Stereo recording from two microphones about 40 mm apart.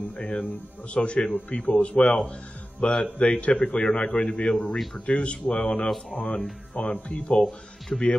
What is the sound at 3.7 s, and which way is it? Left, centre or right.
Speech, left.